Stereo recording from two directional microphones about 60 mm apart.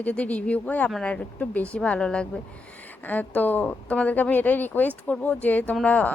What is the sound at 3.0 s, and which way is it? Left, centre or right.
A woman's voice, left.